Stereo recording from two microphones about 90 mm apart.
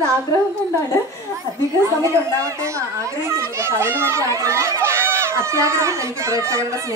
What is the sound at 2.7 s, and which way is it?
A child's voice, 30° right (ahead or behind).